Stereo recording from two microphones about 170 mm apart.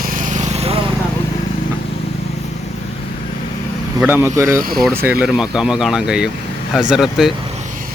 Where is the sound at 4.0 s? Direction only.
10° right (ahead or behind).